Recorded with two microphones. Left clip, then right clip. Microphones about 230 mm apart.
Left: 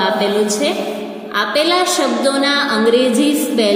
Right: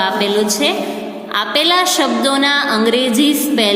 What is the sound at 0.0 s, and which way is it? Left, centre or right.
A woman's voice, right.